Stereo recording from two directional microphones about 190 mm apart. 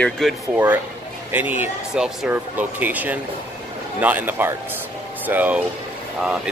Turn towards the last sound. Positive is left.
turn(degrees=-5)  # may be behind; listen again after turning